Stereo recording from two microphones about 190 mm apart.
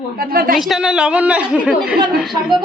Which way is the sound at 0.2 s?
50° right (ahead or behind).